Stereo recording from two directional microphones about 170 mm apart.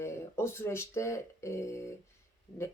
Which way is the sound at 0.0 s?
15° left (ahead or behind).